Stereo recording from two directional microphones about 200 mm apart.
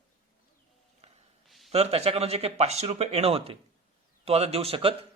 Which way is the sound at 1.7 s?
30° right (ahead or behind).